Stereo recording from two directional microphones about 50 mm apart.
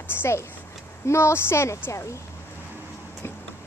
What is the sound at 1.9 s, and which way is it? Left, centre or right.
Speech, left.